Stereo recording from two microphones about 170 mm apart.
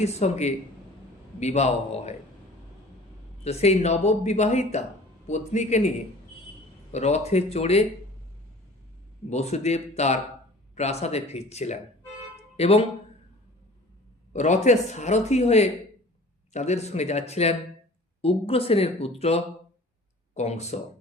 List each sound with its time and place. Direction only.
0.0 s speech: 40° left (ahead or behind)
3.4 s a man's voice: 40° left (ahead or behind)
6.9 s speech: 40° left (ahead or behind)
9.3 s speech: 40° left (ahead or behind)
12.4 s a sound: 35° left (ahead or behind)
14.3 s speech: 45° left (ahead or behind)